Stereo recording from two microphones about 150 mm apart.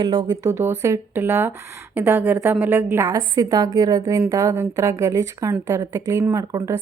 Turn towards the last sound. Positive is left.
turn(degrees=-20)  # may be behind; listen again after turning